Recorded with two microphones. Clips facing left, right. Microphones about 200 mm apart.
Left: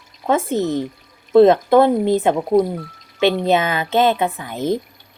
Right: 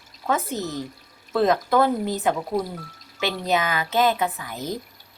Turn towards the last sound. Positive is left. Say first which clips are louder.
# left 9 dB
turn(degrees=25)  # may be behind; listen again after turning